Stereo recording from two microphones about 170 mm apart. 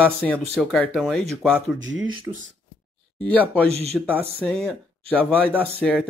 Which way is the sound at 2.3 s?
30° right (ahead or behind).